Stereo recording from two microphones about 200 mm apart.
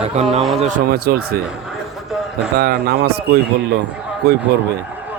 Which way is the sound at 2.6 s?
50° right (ahead or behind).